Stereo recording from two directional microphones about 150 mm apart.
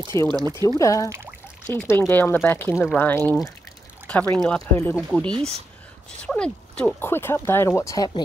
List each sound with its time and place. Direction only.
0.1 s speech: 20° left (ahead or behind)